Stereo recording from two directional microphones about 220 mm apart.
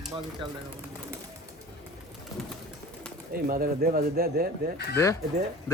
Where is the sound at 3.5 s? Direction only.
40° right (ahead or behind).